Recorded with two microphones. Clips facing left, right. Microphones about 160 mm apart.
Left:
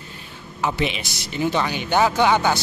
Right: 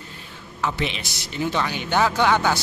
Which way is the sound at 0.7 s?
5° left (ahead or behind).